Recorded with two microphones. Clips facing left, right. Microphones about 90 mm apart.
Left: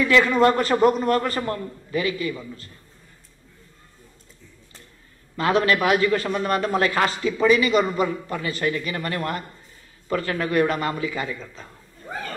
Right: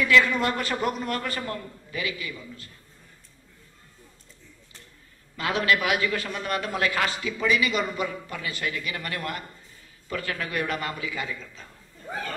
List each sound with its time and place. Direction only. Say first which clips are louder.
0.1 s a man's voice: left 5 dB; 40° left (ahead or behind)
5.4 s a man's voice: left 5 dB; 35° left (ahead or behind)